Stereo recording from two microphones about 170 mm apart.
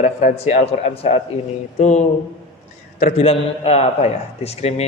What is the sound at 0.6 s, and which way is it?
A man's voice, 35° left (ahead or behind).